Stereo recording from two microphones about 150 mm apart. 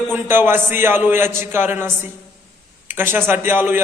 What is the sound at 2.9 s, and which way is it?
Speech, 15° right (ahead or behind).